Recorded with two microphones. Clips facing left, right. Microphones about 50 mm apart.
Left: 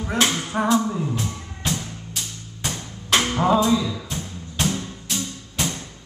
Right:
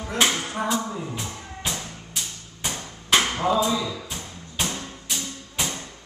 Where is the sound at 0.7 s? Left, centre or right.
Centre.